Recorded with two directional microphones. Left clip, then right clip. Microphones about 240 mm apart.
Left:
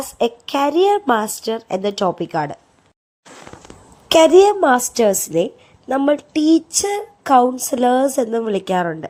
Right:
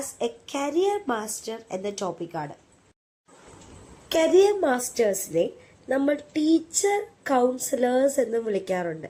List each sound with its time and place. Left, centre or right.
0.2 s speech: left
4.1 s speech: left
6.5 s speech: left